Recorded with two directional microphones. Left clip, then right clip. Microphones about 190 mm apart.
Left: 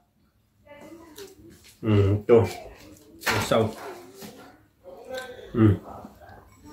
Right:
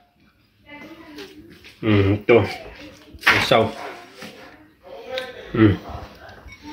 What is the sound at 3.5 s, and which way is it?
Speech, 30° right (ahead or behind).